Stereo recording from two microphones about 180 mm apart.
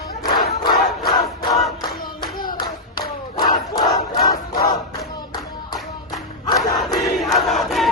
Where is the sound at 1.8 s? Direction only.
25° left (ahead or behind).